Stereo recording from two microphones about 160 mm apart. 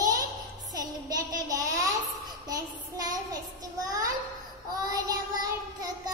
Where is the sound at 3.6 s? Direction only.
20° right (ahead or behind).